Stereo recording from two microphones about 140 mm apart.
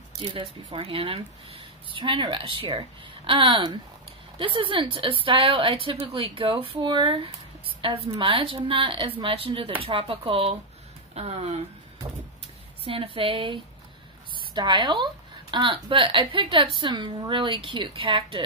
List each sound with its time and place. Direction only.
0.2 s a woman's voice: 40° right (ahead or behind)
12.8 s a woman's voice: 40° right (ahead or behind)